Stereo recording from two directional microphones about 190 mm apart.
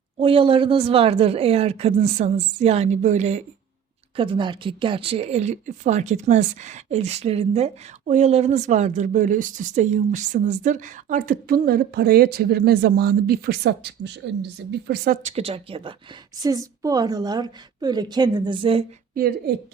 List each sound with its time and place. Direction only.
0.2 s speech: 30° right (ahead or behind)
4.2 s speech: 25° right (ahead or behind); by 15.2 s 55° right (ahead or behind)
15.2 s a woman's voice: 35° right (ahead or behind)
19.1 s a woman's voice: 50° right (ahead or behind)